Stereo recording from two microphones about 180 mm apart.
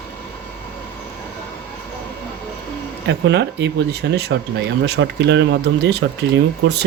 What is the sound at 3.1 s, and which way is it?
Speech, 75° right (ahead or behind).